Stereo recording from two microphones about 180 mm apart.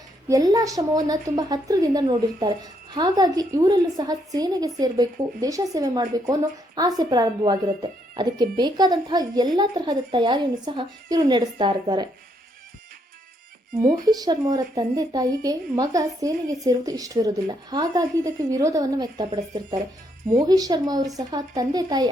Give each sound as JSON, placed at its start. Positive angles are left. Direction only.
{"t": 0.3, "sound": "a woman's voice", "side_deg": -20}
{"t": 14.1, "sound": "a woman's voice", "side_deg": -20}